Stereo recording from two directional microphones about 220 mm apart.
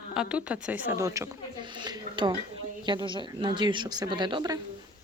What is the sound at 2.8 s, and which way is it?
Speech, 20° right (ahead or behind).